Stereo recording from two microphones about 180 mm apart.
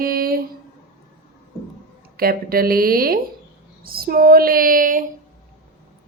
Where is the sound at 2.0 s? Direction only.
55° right (ahead or behind).